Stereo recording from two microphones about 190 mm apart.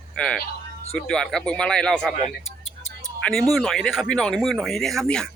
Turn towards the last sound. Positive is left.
turn(degrees=5)  # may be behind; listen again after turning